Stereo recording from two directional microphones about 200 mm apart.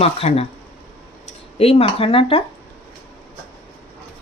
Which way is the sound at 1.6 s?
30° left (ahead or behind).